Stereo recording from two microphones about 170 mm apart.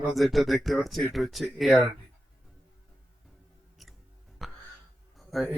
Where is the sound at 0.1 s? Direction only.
Centre (ahead or behind).